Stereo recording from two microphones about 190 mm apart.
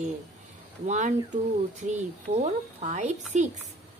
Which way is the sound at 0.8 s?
40° right (ahead or behind).